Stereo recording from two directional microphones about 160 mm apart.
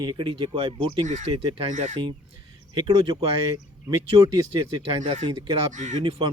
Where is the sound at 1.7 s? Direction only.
45° right (ahead or behind).